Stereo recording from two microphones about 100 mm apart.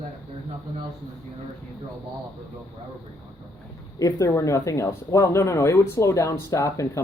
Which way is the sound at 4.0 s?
35° left (ahead or behind).